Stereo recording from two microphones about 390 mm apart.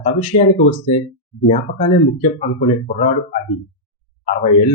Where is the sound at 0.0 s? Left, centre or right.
Centre.